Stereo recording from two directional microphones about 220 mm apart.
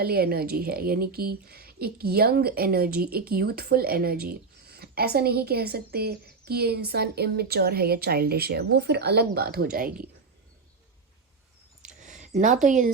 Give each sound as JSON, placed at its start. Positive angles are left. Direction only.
{"t": 0.0, "sound": "a woman's voice", "side_deg": -45}
{"t": 12.0, "sound": "a sound", "side_deg": -35}
{"t": 12.6, "sound": "speech", "side_deg": -35}